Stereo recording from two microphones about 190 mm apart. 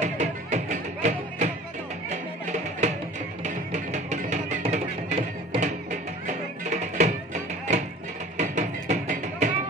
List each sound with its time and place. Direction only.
0.0 s music: 40° right (ahead or behind)